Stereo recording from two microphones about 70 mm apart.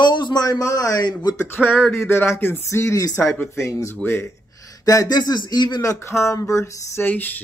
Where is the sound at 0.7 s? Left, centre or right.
Left.